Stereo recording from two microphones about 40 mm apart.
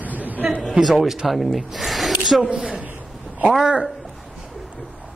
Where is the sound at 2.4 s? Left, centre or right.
Right.